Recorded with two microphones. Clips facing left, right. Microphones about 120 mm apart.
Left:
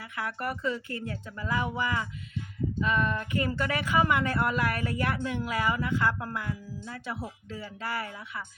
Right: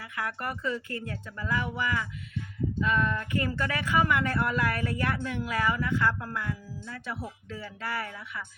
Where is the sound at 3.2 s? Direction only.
15° left (ahead or behind).